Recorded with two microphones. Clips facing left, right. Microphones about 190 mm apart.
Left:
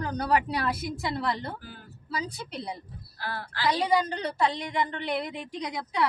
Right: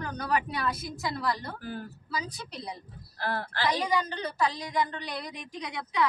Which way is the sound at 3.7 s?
30° left (ahead or behind).